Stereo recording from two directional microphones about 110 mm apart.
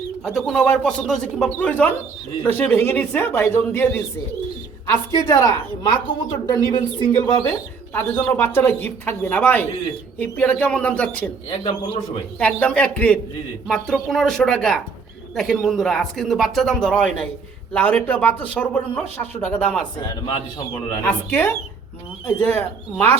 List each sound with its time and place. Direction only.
0.3 s speech: 5° left (ahead or behind)
4.9 s speech: 30° left (ahead or behind)
5.8 s a woman's voice: 45° left (ahead or behind)
7.9 s speech: 20° left (ahead or behind)
12.4 s speech: 10° left (ahead or behind)
21.0 s speech: 15° left (ahead or behind)